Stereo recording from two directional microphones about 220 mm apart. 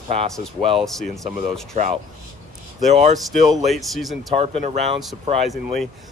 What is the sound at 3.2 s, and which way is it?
Speech, centre (ahead or behind).